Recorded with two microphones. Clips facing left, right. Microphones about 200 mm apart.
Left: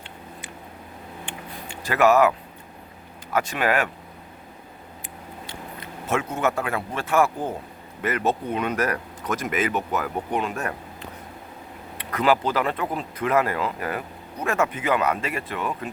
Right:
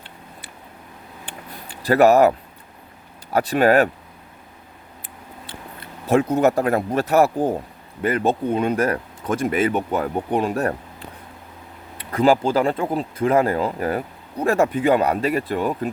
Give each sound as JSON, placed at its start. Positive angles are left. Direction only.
{"t": 1.2, "sound": "vehicle", "side_deg": -35}
{"t": 3.3, "sound": "speech", "side_deg": -35}
{"t": 5.5, "sound": "speech", "side_deg": -35}
{"t": 12.1, "sound": "speech", "side_deg": -30}